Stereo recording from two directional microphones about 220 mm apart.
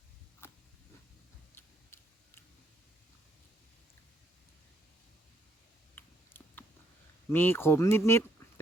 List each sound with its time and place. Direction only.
0.4 s a sound: 10° left (ahead or behind)
1.5 s tick-tock: 10° left (ahead or behind)
5.9 s tick-tock: 10° left (ahead or behind)
7.3 s speech: 10° left (ahead or behind)